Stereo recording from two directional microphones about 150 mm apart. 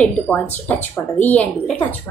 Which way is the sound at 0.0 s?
10° left (ahead or behind).